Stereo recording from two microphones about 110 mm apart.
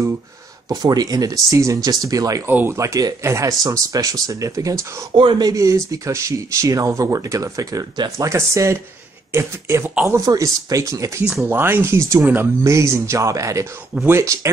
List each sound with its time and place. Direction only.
0.7 s speech: 35° right (ahead or behind)
5.1 s speech: 45° right (ahead or behind)
5.5 s speech: 30° right (ahead or behind)